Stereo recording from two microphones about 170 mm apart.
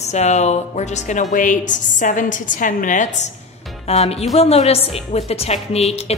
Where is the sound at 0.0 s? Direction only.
40° left (ahead or behind).